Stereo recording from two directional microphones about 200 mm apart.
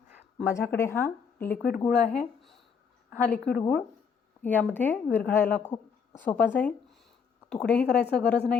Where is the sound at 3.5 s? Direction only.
5° left (ahead or behind).